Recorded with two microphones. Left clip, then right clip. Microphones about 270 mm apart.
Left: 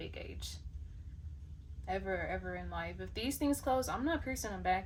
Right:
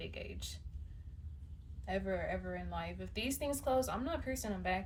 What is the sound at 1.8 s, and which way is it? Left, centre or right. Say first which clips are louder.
A woman's voice: left 1 dB; centre.